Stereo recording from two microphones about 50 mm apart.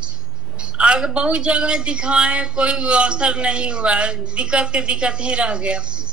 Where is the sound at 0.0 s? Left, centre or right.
Centre.